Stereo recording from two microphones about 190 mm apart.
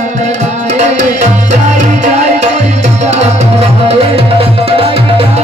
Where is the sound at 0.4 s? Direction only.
35° right (ahead or behind).